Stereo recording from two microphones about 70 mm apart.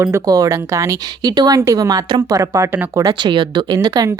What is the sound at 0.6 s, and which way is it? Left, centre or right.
Speech, right.